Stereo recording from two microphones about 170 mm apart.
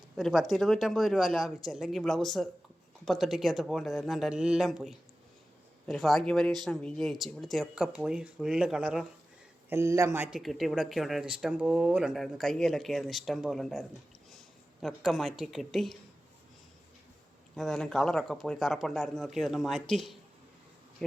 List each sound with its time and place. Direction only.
0.2 s speech: centre (ahead or behind)
9.6 s speech: 15° right (ahead or behind)
10.3 s speech: centre (ahead or behind)
17.5 s speech: centre (ahead or behind)